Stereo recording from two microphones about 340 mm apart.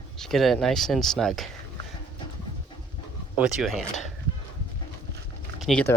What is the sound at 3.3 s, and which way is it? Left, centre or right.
Speech, centre.